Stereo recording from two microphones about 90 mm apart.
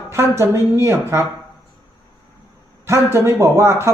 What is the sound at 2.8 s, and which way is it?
A man's voice, 30° right (ahead or behind).